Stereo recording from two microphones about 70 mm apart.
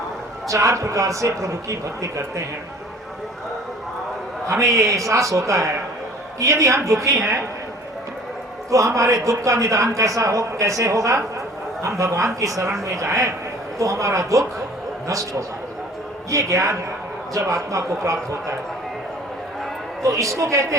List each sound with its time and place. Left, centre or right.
0.4 s speech: right
4.4 s speech: right
8.7 s speech: right
20.0 s speech: right